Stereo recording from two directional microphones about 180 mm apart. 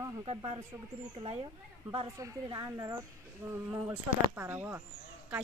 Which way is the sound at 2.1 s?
20° right (ahead or behind).